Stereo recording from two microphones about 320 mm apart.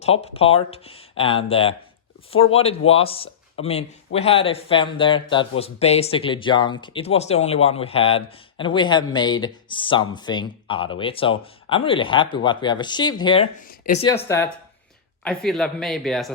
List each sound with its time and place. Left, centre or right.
0.0 s speech: centre
14.2 s a man's voice: centre